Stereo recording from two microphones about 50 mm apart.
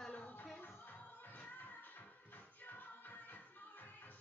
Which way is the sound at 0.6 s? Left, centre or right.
Left.